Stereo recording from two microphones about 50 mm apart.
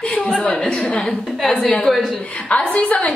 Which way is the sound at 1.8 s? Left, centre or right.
Centre.